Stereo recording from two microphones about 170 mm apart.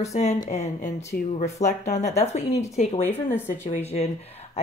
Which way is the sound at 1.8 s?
40° left (ahead or behind).